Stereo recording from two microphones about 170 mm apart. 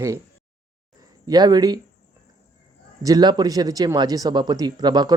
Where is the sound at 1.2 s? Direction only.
25° right (ahead or behind).